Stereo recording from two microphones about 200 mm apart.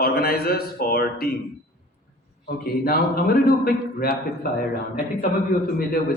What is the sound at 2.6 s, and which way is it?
A man's voice, 50° left (ahead or behind).